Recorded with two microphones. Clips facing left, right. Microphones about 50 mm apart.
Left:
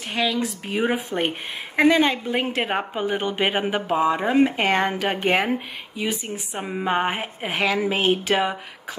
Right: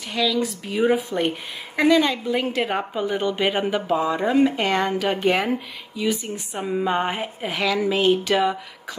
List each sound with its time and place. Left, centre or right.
0.1 s speech: left
6.3 s speech: left
7.6 s speech: left